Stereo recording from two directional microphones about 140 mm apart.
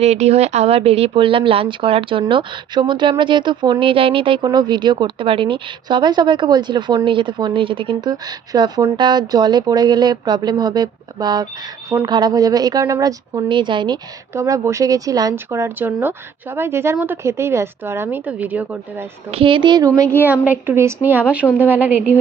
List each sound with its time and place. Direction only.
0.0 s speech: 50° right (ahead or behind); by 14.0 s 30° right (ahead or behind)
14.3 s speech: 20° right (ahead or behind)
19.3 s speech: 40° right (ahead or behind)
20.2 s speech: 10° right (ahead or behind)